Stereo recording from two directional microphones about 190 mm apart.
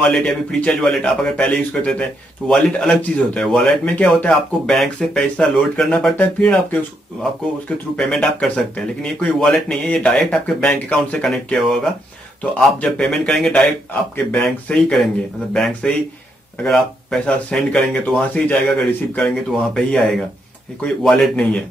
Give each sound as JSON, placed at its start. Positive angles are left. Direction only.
{"t": 0.1, "sound": "a man's voice", "side_deg": 5}
{"t": 7.9, "sound": "a man's voice", "side_deg": 5}